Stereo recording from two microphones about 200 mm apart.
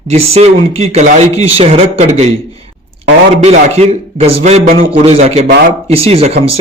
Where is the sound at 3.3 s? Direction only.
30° right (ahead or behind).